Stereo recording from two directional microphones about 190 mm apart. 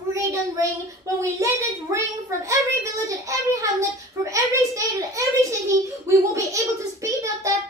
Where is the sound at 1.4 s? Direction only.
15° right (ahead or behind).